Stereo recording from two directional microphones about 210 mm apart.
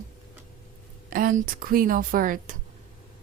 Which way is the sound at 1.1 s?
40° right (ahead or behind).